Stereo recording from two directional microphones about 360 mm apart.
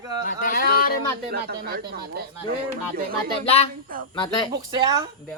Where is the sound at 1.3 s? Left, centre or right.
Right.